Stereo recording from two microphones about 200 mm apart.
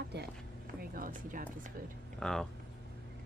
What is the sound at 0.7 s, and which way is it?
Speech, 45° right (ahead or behind).